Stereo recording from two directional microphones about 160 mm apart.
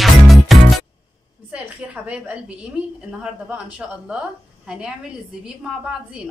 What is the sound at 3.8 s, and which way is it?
A woman's voice, 5° right (ahead or behind).